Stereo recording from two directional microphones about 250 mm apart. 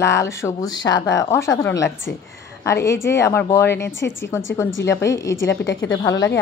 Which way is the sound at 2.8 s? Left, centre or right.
Centre.